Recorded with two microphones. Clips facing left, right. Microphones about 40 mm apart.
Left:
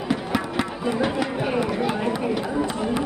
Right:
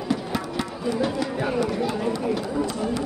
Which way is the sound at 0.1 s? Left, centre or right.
Left.